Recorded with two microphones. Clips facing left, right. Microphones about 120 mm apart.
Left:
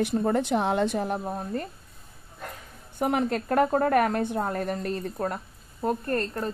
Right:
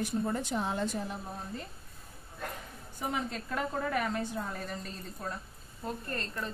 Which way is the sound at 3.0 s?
65° left (ahead or behind).